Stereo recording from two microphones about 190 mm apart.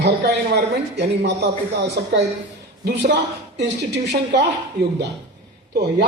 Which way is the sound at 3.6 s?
65° right (ahead or behind).